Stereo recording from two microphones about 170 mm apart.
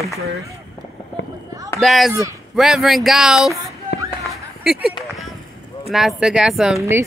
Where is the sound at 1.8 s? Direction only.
Centre (ahead or behind).